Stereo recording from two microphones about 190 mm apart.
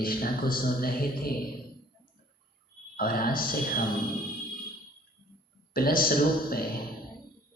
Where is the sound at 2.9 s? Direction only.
50° left (ahead or behind).